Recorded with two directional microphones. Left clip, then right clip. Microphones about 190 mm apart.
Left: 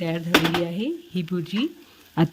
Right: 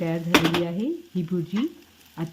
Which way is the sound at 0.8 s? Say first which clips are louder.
Even; 40° left (ahead or behind).